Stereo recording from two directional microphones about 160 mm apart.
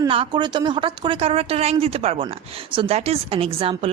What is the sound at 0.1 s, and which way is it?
A woman's voice, 30° right (ahead or behind).